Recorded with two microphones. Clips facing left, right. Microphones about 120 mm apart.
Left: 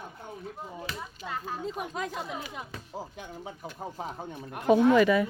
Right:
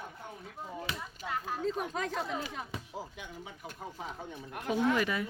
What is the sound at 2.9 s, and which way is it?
Speech, 40° left (ahead or behind).